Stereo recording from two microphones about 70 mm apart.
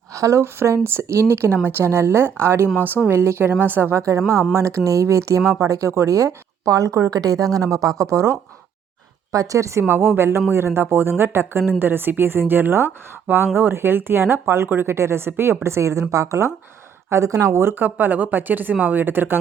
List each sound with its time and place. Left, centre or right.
0.1 s a woman's voice: right
4.5 s speech: right
9.8 s a woman's voice: right
17.6 s a woman's voice: right
17.8 s speech: right